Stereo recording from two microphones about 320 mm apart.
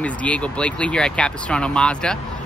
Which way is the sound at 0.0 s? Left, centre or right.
Centre.